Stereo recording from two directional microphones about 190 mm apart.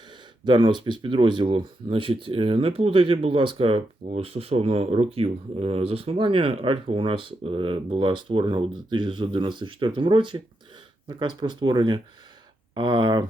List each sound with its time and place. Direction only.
0.4 s speech: 25° right (ahead or behind)